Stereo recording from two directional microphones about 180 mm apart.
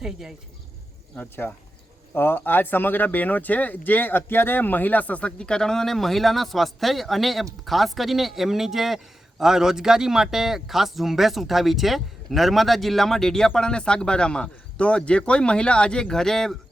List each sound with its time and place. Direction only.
0.0 s speech: centre (ahead or behind)
1.1 s speech: 10° left (ahead or behind)